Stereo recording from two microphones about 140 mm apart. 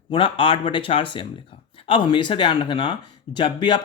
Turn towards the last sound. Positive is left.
turn(degrees=35)  # may be behind; listen again after turning